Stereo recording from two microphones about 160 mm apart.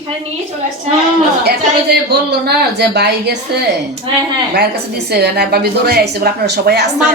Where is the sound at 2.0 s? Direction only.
90° right.